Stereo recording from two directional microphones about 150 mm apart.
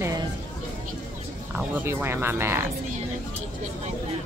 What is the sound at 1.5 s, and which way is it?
Speech, 10° right (ahead or behind).